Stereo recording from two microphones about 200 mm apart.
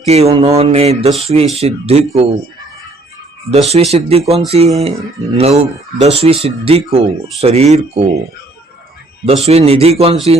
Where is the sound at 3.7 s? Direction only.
30° right (ahead or behind).